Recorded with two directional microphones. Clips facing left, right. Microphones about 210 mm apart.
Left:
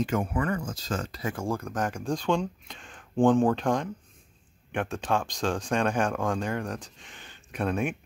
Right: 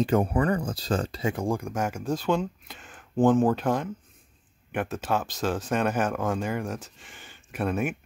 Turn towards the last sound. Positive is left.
turn(degrees=-5)  # may be behind; listen again after turning